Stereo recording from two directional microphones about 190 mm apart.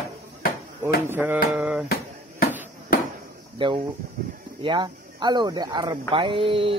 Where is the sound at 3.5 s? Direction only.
25° right (ahead or behind).